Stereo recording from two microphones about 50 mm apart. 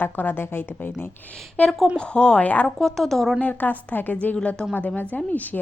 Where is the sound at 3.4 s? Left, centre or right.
Left.